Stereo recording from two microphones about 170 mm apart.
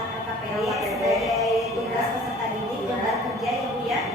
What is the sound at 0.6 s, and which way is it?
Music, centre (ahead or behind).